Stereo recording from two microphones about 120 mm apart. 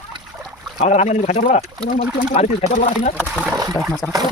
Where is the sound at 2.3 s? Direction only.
65° left (ahead or behind).